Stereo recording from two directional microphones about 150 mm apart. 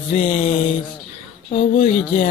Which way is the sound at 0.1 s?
55° left (ahead or behind).